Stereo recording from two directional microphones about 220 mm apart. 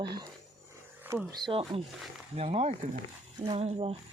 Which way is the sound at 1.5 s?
25° right (ahead or behind).